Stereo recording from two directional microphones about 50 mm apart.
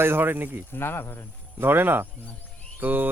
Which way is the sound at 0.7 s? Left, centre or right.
Left.